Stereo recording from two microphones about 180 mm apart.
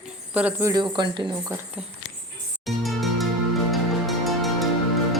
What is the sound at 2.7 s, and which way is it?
Music, centre (ahead or behind).